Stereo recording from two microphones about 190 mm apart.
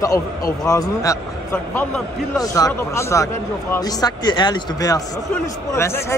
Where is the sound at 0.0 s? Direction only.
20° left (ahead or behind).